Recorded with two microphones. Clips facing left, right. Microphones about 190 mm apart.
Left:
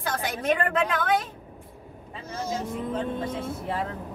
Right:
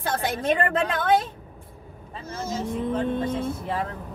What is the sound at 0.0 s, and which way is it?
A woman's voice, 30° right (ahead or behind).